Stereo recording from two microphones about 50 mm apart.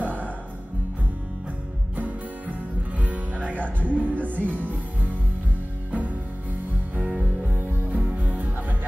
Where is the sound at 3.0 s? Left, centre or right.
Right.